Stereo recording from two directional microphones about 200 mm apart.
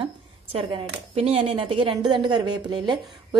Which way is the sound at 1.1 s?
30° right (ahead or behind).